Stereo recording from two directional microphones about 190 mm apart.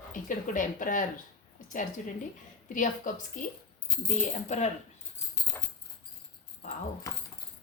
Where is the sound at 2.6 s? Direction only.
45° left (ahead or behind).